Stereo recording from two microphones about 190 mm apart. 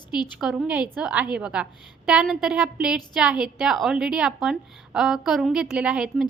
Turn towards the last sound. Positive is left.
turn(degrees=-5)  # may be behind; listen again after turning